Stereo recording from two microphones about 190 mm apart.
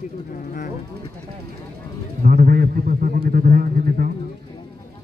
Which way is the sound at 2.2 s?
50° right (ahead or behind).